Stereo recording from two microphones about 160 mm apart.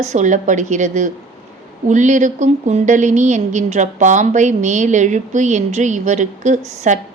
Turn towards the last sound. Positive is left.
turn(degrees=-50)  # may be behind; listen again after turning